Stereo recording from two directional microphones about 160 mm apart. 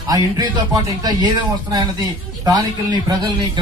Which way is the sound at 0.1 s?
25° right (ahead or behind).